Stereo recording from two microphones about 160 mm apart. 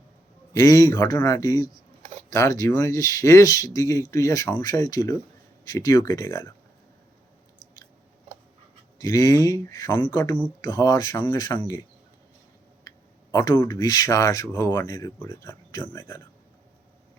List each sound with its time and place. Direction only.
0.5 s speech: 20° left (ahead or behind)
9.0 s speech: 20° left (ahead or behind)
13.3 s speech: 25° left (ahead or behind)